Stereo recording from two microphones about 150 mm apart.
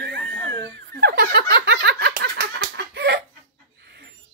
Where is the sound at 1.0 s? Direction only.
90° right.